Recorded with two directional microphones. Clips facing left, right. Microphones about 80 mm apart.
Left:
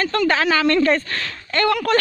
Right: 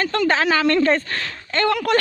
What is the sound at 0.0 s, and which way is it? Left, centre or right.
A woman's voice, centre.